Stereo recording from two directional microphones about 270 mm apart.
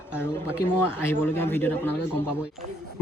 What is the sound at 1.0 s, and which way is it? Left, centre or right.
Speech, centre.